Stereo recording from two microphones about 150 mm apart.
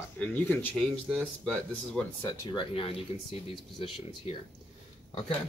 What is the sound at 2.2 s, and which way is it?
Speech, 30° left (ahead or behind).